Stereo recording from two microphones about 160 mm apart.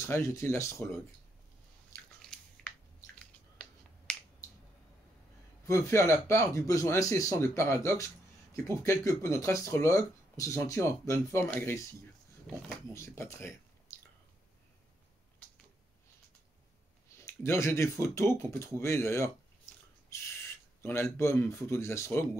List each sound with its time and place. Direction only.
0.0 s speech: 20° left (ahead or behind)
1.9 s biting: 20° left (ahead or behind)
2.2 s squish: 5° left (ahead or behind)
5.7 s speech: 20° left (ahead or behind)
12.5 s speech: centre (ahead or behind)
12.9 s speech: 15° left (ahead or behind)
17.2 s speech: 15° left (ahead or behind)
20.8 s speech: 15° left (ahead or behind)